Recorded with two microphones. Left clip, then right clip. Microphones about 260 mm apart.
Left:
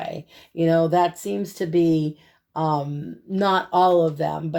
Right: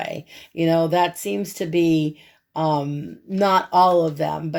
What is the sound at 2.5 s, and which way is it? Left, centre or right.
Speech, right.